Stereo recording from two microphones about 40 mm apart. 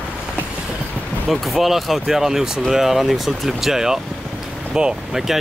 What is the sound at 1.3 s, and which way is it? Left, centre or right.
Speech, centre.